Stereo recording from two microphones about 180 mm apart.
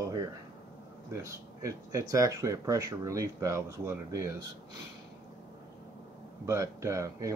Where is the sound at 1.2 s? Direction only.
15° right (ahead or behind).